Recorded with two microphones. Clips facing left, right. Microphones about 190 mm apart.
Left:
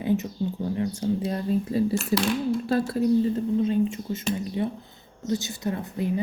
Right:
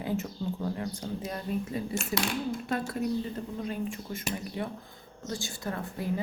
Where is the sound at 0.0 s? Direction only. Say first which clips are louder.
Left 7 dB; 20° left (ahead or behind).